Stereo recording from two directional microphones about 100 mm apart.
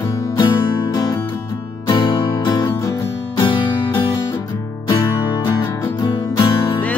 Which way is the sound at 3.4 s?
55° left (ahead or behind).